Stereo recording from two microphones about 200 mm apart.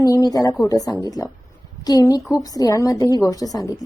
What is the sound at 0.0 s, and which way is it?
A woman's voice, 20° left (ahead or behind).